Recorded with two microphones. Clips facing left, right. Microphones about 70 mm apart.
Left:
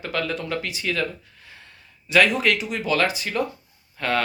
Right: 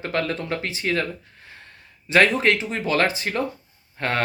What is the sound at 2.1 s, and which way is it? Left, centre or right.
Speech, right.